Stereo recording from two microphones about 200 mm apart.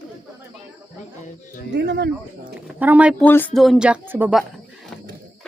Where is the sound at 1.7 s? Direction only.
60° right (ahead or behind).